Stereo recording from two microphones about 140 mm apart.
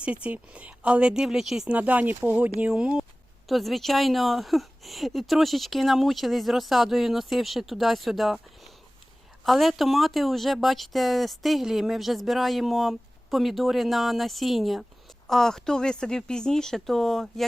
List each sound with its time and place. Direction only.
0.0 s a woman's voice: 10° right (ahead or behind)